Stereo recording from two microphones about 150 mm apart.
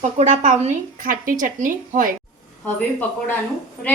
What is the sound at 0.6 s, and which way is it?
Speech, 65° right (ahead or behind).